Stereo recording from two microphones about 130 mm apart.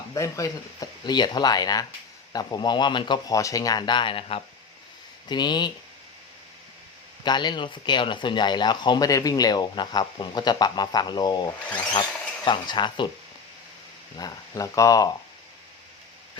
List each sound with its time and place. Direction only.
0.1 s speech: 25° left (ahead or behind); by 4.4 s 45° left (ahead or behind)
5.3 s speech: 35° left (ahead or behind)
7.3 s speech: 35° left (ahead or behind)
14.2 s speech: 30° left (ahead or behind)